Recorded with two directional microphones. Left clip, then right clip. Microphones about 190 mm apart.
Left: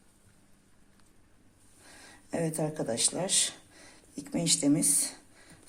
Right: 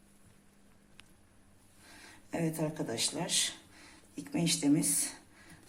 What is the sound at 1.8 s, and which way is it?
Speech, 55° left (ahead or behind).